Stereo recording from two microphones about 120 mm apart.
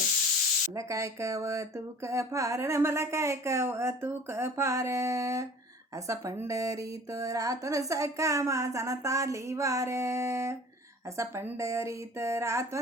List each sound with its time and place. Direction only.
0.7 s speech: 25° right (ahead or behind)